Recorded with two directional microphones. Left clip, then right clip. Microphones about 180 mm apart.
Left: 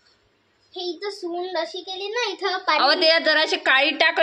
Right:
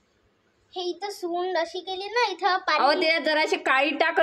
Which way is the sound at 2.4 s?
20° left (ahead or behind).